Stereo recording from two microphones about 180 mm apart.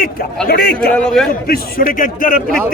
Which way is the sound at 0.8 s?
5° left (ahead or behind).